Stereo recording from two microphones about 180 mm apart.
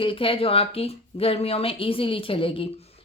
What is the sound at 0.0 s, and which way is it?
A woman's voice, 30° left (ahead or behind).